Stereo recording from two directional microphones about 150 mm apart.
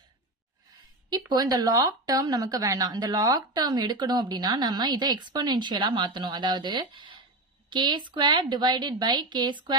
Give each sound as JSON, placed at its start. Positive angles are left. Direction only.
{"t": 1.3, "sound": "speech", "side_deg": -30}